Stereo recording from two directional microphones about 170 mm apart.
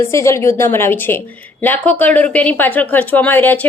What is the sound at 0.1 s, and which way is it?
Speech, 15° left (ahead or behind).